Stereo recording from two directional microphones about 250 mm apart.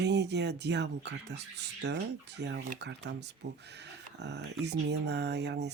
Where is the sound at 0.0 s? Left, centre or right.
Right.